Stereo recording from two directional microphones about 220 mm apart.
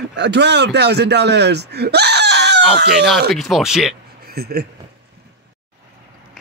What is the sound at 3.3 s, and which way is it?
Speech, centre (ahead or behind).